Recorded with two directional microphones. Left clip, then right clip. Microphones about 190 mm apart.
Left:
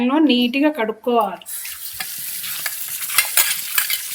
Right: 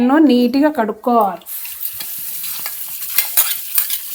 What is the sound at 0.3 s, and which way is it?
Speech, 90° right.